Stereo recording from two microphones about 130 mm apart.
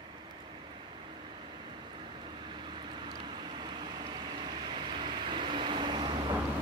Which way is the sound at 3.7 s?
35° right (ahead or behind).